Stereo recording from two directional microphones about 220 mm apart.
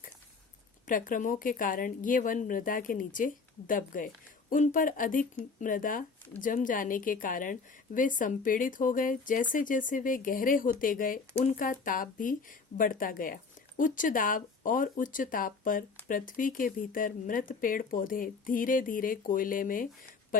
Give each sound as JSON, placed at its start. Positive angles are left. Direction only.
{"t": 0.9, "sound": "a woman's voice", "side_deg": 40}